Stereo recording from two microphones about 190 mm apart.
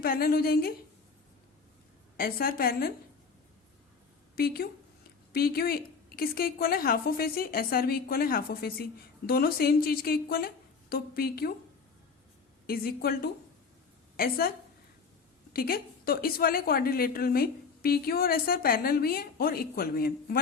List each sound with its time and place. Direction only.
0.0 s a woman's voice: 50° left (ahead or behind)
2.1 s a woman's voice: 50° left (ahead or behind)
4.4 s a woman's voice: 55° left (ahead or behind)
12.6 s a woman's voice: 50° left (ahead or behind)
15.5 s a woman's voice: 50° left (ahead or behind)